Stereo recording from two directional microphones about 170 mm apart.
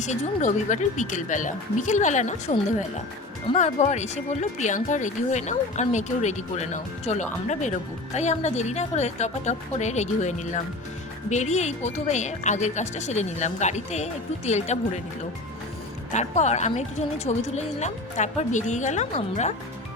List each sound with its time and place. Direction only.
0.0 s speech: 45° left (ahead or behind)
16.1 s speech: 40° left (ahead or behind)